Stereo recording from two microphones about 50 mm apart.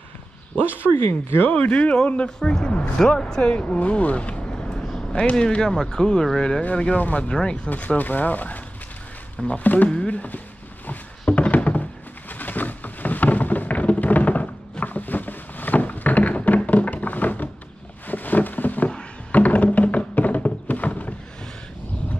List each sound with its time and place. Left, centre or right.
0.9 s speech: left
1.5 s speech: left
3.4 s a sound: left
5.3 s speech: centre
7.2 s speech: centre
7.7 s speech: left
9.6 s speech: left
9.8 s speech: left
10.9 s thunk: left
12.3 s a sound: left
19.3 s music: left